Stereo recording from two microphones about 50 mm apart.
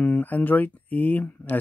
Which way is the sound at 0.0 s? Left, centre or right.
Left.